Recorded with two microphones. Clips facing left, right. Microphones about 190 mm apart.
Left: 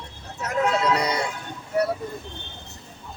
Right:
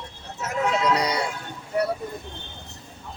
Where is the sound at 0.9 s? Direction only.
10° right (ahead or behind).